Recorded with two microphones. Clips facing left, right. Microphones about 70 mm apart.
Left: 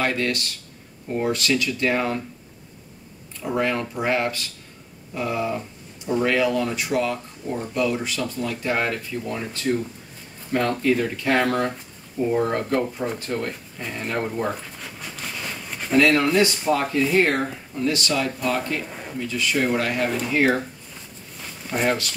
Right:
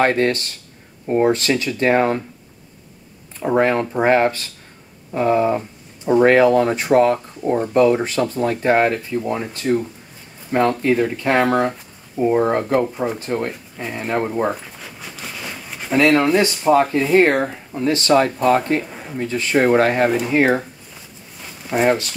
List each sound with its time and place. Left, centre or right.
0.0 s speech: right
3.3 s speech: right
14.8 s a sound: centre
16.0 s speech: right
18.9 s a sound: centre
19.1 s speech: right
21.8 s speech: right